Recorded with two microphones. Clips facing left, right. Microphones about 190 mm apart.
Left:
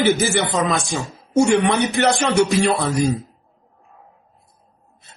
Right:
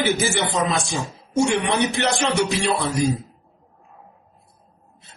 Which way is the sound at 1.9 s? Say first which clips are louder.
Left 4 dB; 40° left (ahead or behind).